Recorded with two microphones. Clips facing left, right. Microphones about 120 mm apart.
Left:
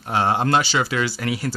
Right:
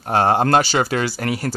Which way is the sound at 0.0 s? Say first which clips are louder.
Right 4 dB; 45° right (ahead or behind).